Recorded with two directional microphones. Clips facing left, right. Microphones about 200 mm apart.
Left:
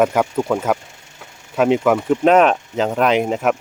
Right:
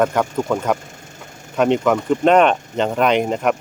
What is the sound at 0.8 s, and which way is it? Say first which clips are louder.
Vehicle: right 4 dB; 45° right (ahead or behind).